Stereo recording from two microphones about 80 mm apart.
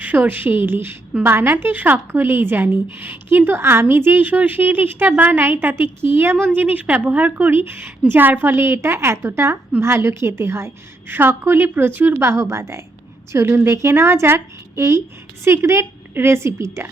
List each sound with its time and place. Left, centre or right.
0.0 s a woman's voice: right